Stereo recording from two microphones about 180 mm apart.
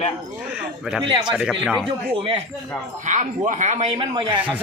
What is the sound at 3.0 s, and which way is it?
Speech, 45° right (ahead or behind).